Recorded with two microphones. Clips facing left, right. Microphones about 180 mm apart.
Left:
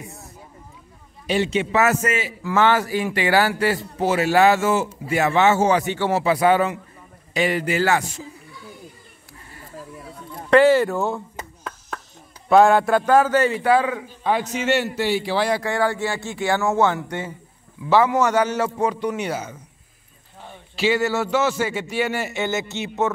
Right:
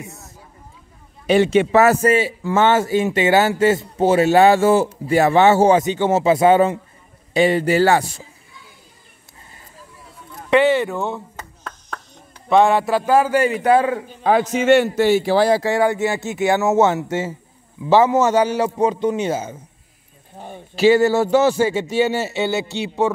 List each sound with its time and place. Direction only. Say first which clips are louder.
1.2 s a man's voice: right 7 dB; 55° right (ahead or behind)
1.8 s a man's voice: right 5 dB; 35° right (ahead or behind)
5.8 s a man's voice: right 4 dB; 20° right (ahead or behind)
10.5 s chop: left 1 dB; centre (ahead or behind)
12.4 s speech: even; centre (ahead or behind)
14.5 s a man's voice: right 7 dB; 50° right (ahead or behind); by 19.6 s 25° right (ahead or behind)
20.3 s a man's voice: right 6 dB; 45° right (ahead or behind); by 23.1 s 15° right (ahead or behind)